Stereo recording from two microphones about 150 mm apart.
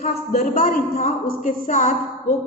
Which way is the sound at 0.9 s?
50° left (ahead or behind).